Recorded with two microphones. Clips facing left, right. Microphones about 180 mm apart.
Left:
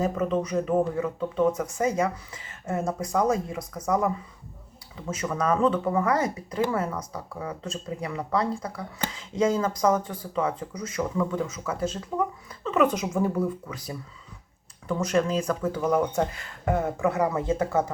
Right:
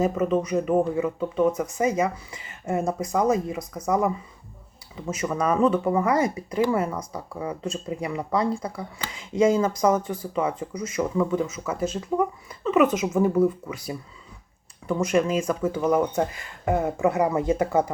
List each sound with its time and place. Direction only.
0.0 s speech: 5° right (ahead or behind)